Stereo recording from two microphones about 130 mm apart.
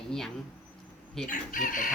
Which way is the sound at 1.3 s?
85° left.